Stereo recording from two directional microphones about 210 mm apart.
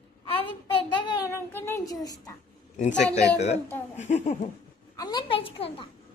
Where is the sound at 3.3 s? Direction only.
30° left (ahead or behind).